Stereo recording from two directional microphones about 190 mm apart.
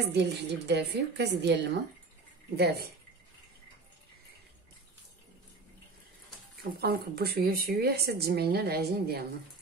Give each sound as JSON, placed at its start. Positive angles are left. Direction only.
{"t": 0.1, "sound": "speech", "side_deg": -60}
{"t": 6.6, "sound": "speech", "side_deg": -55}